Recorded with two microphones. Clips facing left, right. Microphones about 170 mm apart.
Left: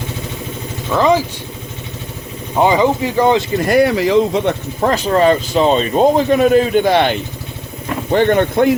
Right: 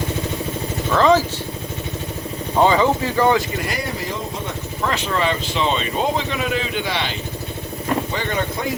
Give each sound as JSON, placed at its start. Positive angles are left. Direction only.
{"t": 0.9, "sound": "speech", "side_deg": 15}
{"t": 2.6, "sound": "speech", "side_deg": 15}
{"t": 3.7, "sound": "speech", "side_deg": 70}
{"t": 4.8, "sound": "speech", "side_deg": 40}